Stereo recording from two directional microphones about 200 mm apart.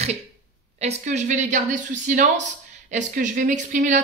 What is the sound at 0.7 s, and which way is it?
Speech, 30° right (ahead or behind).